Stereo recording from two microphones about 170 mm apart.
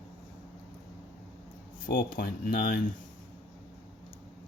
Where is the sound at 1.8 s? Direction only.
55° left (ahead or behind).